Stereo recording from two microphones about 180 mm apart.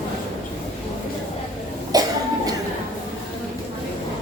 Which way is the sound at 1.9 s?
20° right (ahead or behind).